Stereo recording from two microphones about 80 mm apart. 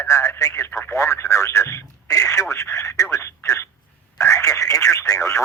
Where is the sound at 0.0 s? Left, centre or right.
Left.